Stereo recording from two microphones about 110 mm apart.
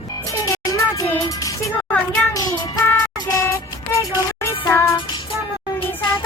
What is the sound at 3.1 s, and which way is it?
Vehicle, 35° left (ahead or behind).